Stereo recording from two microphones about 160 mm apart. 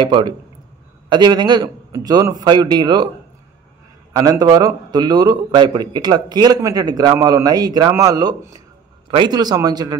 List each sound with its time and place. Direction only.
0.0 s a man's voice: 30° right (ahead or behind)
4.1 s a man's voice: 25° right (ahead or behind)